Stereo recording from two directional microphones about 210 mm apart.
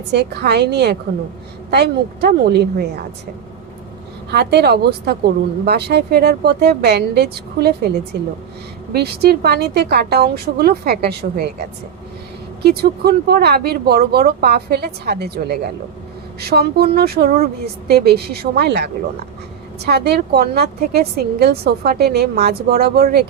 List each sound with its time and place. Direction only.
0.1 s speech: 50° right (ahead or behind)
4.3 s speech: 50° right (ahead or behind)
8.9 s speech: 50° right (ahead or behind)
12.6 s speech: 50° right (ahead or behind)